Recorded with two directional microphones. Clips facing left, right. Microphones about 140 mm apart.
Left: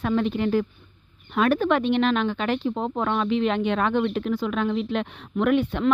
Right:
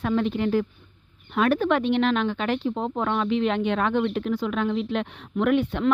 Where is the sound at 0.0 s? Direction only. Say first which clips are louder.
Even; 25° left (ahead or behind).